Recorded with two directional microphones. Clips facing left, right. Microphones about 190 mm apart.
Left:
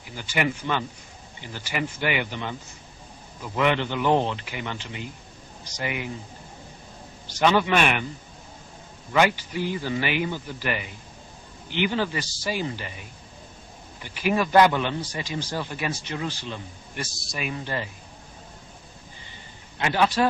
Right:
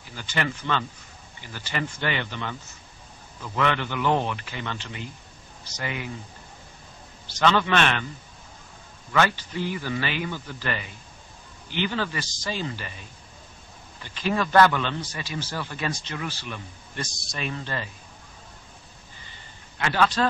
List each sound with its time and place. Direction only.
0.0 s a man's voice: 15° left (ahead or behind)
7.3 s a man's voice: 15° left (ahead or behind)
9.1 s a man's voice: 15° left (ahead or behind)
14.0 s a man's voice: 15° left (ahead or behind)
17.0 s speech: 5° left (ahead or behind)
17.5 s a man's voice: 15° left (ahead or behind)
19.8 s a man's voice: 15° left (ahead or behind)